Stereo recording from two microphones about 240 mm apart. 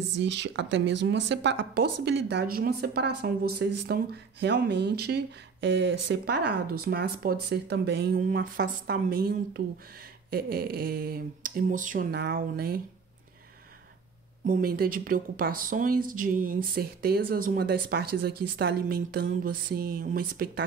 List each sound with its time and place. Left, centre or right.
0.2 s speech: right
14.4 s speech: right